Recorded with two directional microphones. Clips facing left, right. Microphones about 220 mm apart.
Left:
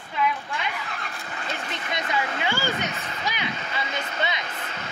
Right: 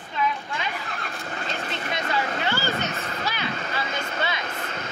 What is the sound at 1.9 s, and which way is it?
Speech, 15° left (ahead or behind).